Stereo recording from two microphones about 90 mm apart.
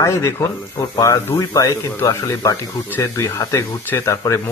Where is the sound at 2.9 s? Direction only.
25° left (ahead or behind).